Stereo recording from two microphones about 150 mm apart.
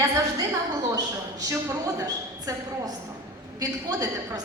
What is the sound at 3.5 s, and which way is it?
Speech, 25° right (ahead or behind).